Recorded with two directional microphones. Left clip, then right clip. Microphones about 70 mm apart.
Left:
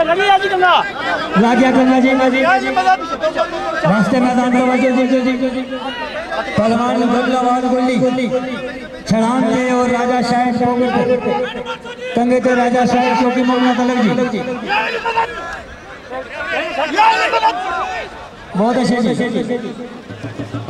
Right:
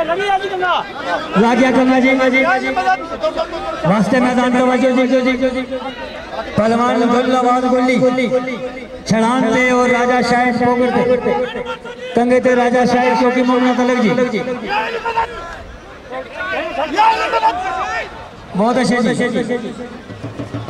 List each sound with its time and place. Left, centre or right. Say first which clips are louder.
0.0 s speech: left 4 dB; centre
1.4 s a man's voice: even; centre
2.4 s a man's voice: left 2 dB; centre
3.2 s a man's voice: left 2 dB; centre; by 10.8 s right
10.9 s a man's voice: right 1 dB; centre
12.2 s a man's voice: right 1 dB; centre
13.5 s a man's voice: even; centre
13.7 s a man's voice: right 1 dB; centre
14.5 s a man's voice: left 1 dB; centre
16.4 s a sound: left 1 dB; left
16.9 s a man's voice: left 1 dB; centre
18.6 s a man's voice: right 1 dB; right